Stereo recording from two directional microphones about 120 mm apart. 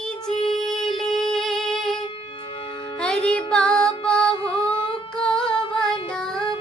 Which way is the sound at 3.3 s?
10° left (ahead or behind).